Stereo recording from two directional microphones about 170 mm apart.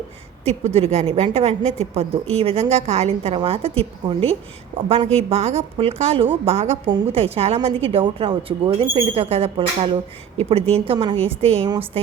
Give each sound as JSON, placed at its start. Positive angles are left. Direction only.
{"t": 0.4, "sound": "a woman's voice", "side_deg": -35}